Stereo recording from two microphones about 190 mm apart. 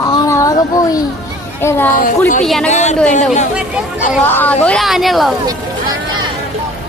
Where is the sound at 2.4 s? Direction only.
Centre (ahead or behind).